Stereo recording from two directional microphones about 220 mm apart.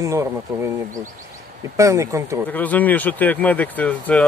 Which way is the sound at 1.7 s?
15° right (ahead or behind).